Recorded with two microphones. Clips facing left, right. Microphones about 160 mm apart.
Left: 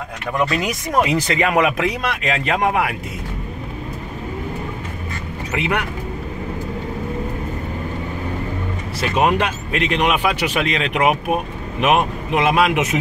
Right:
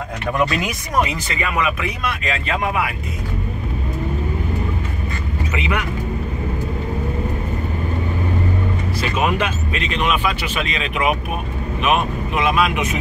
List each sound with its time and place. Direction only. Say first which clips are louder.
1.2 s speech: left 5 dB; 80° left
5.5 s speech: left 3 dB; 65° left (ahead or behind)
9.2 s speech: left 3 dB; 65° left (ahead or behind)